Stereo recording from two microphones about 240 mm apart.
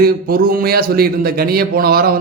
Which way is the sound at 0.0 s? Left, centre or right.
Right.